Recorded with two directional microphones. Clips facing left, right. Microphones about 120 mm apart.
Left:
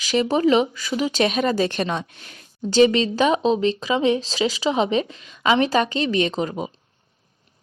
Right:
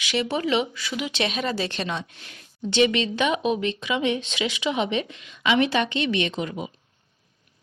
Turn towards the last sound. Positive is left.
turn(degrees=35)  # may be behind; listen again after turning